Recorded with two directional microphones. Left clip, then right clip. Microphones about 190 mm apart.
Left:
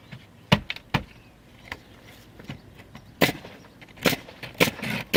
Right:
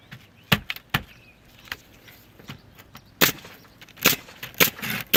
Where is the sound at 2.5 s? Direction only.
20° right (ahead or behind).